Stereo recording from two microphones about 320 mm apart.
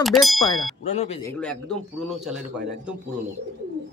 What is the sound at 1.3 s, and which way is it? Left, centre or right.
Speech, centre.